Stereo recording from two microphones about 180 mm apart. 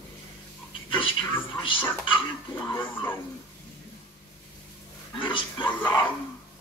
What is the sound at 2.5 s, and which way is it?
Speech, 15° left (ahead or behind).